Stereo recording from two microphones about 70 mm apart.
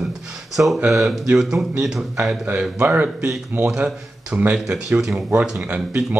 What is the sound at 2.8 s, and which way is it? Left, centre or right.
Speech, right.